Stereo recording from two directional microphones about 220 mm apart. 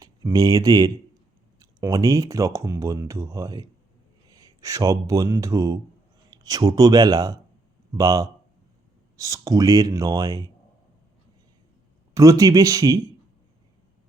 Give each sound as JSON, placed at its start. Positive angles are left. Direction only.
{"t": 0.0, "sound": "speech", "side_deg": -15}
{"t": 12.1, "sound": "speech", "side_deg": -15}